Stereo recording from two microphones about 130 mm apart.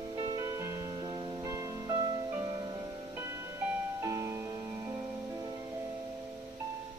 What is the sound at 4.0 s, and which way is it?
Music, 25° right (ahead or behind).